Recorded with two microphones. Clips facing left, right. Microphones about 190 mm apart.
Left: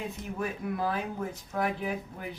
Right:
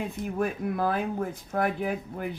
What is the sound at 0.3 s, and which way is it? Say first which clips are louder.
Speech: right 5 dB; 50° right (ahead or behind).